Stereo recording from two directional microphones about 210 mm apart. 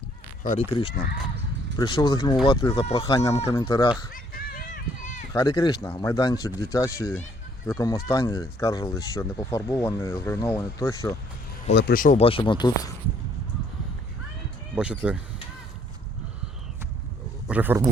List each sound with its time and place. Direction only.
0.4 s speech: 35° left (ahead or behind)
0.7 s speech: 25° left (ahead or behind)
4.1 s run: 45° left (ahead or behind)
5.3 s speech: 15° left (ahead or behind)
11.7 s speech: 50° left (ahead or behind)
12.2 s speech: 25° left (ahead or behind)
14.8 s speech: 5° right (ahead or behind)
17.5 s speech: 10° right (ahead or behind)